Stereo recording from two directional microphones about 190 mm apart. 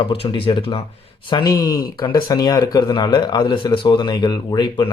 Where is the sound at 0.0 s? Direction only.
30° left (ahead or behind).